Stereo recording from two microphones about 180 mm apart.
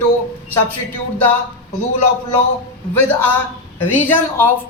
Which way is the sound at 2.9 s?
10° left (ahead or behind).